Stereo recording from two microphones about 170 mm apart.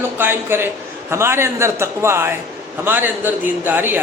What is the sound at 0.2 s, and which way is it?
A man's voice, 10° right (ahead or behind).